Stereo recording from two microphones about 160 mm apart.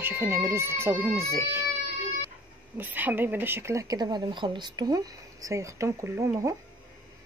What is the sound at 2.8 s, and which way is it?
Speech, 10° right (ahead or behind).